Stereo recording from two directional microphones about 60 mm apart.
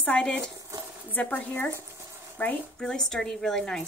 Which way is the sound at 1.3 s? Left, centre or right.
Left.